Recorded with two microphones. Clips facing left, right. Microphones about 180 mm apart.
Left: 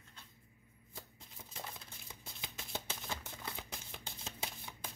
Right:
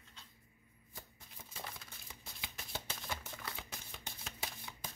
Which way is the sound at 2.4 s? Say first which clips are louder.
Left 2 dB; 15° left (ahead or behind).